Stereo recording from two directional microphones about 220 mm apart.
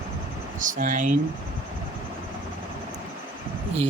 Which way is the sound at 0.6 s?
35° right (ahead or behind).